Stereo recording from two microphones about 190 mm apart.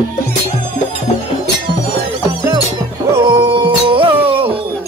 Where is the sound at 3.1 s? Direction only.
25° right (ahead or behind).